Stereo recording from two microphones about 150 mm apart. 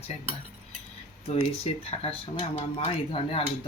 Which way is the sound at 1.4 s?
40° left (ahead or behind).